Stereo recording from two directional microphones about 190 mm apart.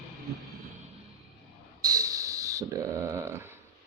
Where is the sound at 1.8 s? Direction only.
20° right (ahead or behind).